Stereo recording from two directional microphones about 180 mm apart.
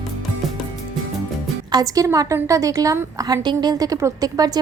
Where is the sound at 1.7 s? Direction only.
20° right (ahead or behind).